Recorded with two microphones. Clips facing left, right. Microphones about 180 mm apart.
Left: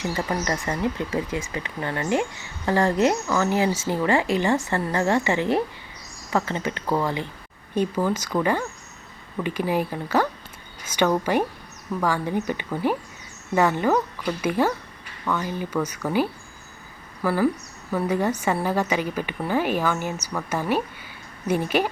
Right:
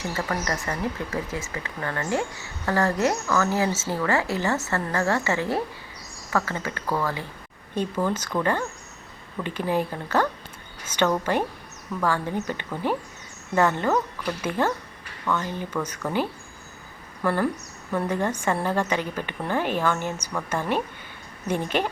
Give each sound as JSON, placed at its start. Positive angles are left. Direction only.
{"t": 0.1, "sound": "a woman's voice", "side_deg": 15}
{"t": 7.8, "sound": "a woman's voice", "side_deg": 10}
{"t": 17.2, "sound": "a woman's voice", "side_deg": 5}